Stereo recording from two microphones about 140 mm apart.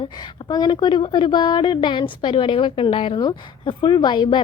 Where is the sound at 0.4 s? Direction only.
30° left (ahead or behind).